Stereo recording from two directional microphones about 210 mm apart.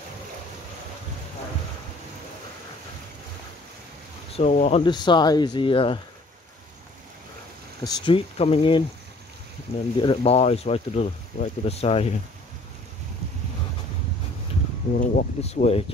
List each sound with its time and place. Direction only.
4.3 s speech: 35° left (ahead or behind)
7.8 s speech: 20° left (ahead or behind)
9.9 s speech: 25° left (ahead or behind)
15.0 s speech: 35° left (ahead or behind)